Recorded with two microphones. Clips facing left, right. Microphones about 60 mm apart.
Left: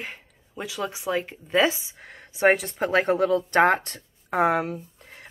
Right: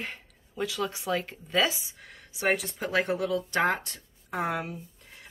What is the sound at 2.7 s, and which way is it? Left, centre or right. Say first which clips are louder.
Speech: left 6 dB; left.